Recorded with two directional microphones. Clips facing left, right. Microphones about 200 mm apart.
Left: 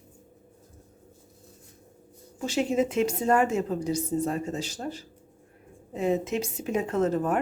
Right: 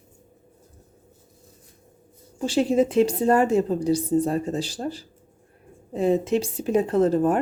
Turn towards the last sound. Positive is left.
turn(degrees=-30)  # may be behind; listen again after turning